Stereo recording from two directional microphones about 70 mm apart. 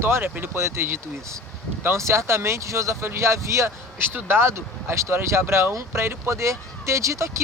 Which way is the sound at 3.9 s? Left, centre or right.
Right.